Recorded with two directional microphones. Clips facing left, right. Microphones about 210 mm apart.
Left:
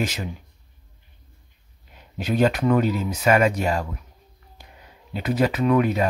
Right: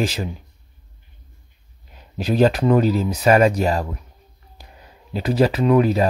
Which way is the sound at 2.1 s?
35° right (ahead or behind).